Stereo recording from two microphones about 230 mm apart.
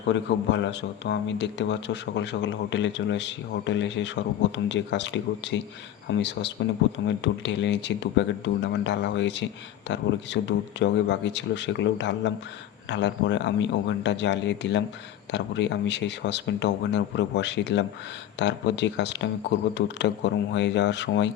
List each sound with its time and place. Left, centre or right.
0.1 s a man's voice: left